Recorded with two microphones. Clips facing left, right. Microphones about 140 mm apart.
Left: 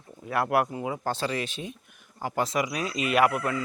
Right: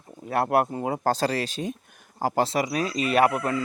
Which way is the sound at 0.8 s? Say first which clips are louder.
Right 5 dB; 40° right (ahead or behind).